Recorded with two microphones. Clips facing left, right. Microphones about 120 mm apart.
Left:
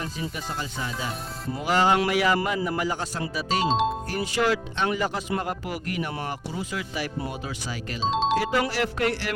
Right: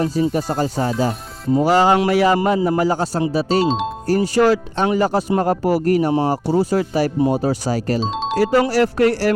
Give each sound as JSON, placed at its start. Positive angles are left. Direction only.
{"t": 0.0, "sound": "speech", "side_deg": -40}
{"t": 3.7, "sound": "speech", "side_deg": 0}
{"t": 4.0, "sound": "speech", "side_deg": -35}
{"t": 8.0, "sound": "music", "side_deg": 0}
{"t": 8.4, "sound": "speech", "side_deg": -40}